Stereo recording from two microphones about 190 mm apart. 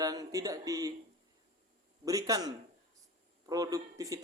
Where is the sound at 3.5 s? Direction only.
20° right (ahead or behind).